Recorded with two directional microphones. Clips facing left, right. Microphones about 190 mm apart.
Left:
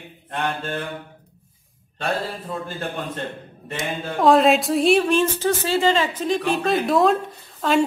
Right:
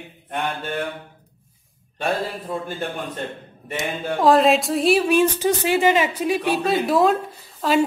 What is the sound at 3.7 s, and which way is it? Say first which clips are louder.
A woman's voice: right 1 dB; centre (ahead or behind).